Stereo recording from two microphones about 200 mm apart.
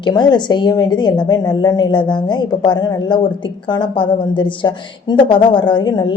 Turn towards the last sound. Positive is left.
turn(degrees=20)  # may be behind; listen again after turning